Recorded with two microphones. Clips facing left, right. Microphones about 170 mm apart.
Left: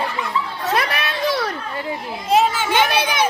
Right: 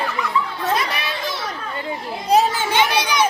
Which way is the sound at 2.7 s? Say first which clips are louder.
Left 1 dB; 50° left (ahead or behind).